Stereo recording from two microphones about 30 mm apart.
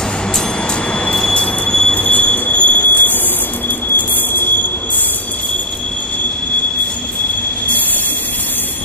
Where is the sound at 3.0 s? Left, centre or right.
Left.